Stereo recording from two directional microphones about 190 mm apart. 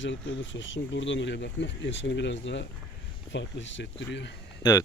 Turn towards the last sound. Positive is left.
turn(degrees=20)  # may be behind; listen again after turning